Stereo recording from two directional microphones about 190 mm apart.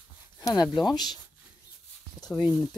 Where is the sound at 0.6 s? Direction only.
Centre (ahead or behind).